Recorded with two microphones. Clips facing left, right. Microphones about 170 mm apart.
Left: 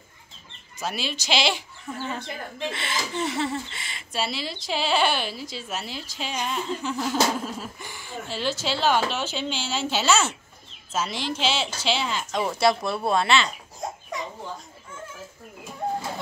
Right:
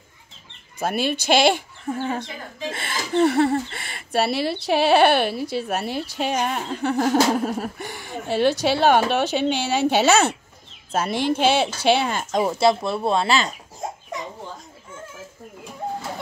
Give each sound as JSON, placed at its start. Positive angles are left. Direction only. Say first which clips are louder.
{"t": 0.7, "sound": "speech", "louder": "right 7 dB", "side_deg": -55}
{"t": 12.4, "sound": "speech", "louder": "right 2 dB", "side_deg": -25}